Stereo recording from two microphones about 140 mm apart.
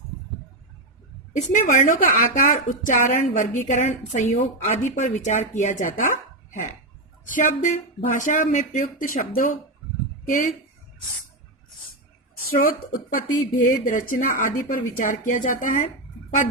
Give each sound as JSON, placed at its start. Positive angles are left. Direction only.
{"t": 1.5, "sound": "a woman's voice", "side_deg": 65}
{"t": 7.3, "sound": "speech", "side_deg": 70}
{"t": 13.1, "sound": "speech", "side_deg": 75}